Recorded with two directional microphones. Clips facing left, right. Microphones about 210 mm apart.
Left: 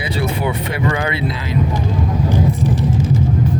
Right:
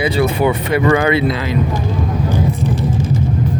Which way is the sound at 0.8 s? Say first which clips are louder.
Right 7 dB; 70° right (ahead or behind).